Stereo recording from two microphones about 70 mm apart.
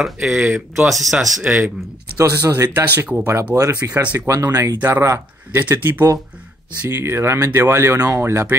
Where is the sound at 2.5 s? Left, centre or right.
Right.